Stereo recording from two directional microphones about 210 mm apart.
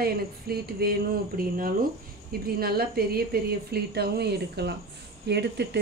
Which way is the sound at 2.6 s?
45° right (ahead or behind).